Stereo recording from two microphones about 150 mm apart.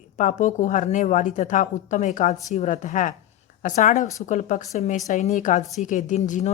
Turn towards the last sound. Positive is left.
turn(degrees=55)  # may be behind; listen again after turning